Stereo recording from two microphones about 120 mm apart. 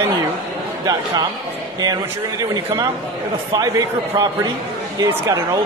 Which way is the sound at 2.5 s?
30° right (ahead or behind).